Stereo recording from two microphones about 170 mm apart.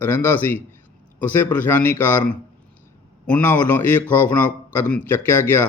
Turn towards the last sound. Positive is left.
turn(degrees=15)  # may be behind; listen again after turning